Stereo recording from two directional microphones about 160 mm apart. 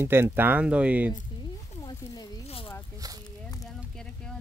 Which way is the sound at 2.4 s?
35° left (ahead or behind).